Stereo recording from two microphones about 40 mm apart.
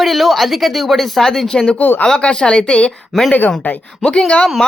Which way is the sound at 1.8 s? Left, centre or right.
Left.